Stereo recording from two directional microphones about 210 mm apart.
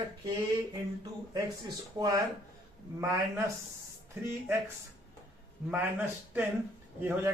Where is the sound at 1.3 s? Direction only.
20° right (ahead or behind).